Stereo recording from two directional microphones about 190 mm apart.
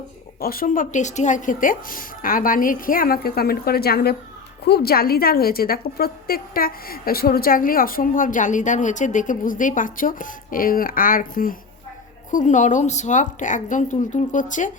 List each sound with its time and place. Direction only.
0.3 s a woman's voice: 50° left (ahead or behind)